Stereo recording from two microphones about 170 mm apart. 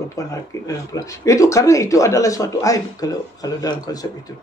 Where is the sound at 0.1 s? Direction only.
20° left (ahead or behind).